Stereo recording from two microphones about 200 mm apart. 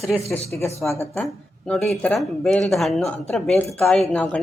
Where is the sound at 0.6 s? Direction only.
15° left (ahead or behind).